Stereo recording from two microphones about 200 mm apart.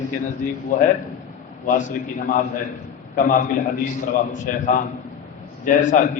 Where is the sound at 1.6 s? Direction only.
40° left (ahead or behind).